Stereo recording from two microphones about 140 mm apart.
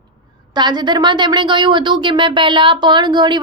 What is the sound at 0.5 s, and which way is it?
Speech, 30° right (ahead or behind).